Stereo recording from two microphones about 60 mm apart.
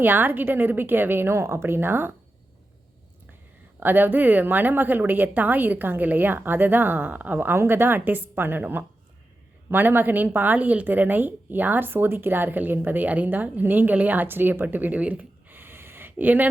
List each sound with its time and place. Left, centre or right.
0.0 s speech: right
3.8 s speech: right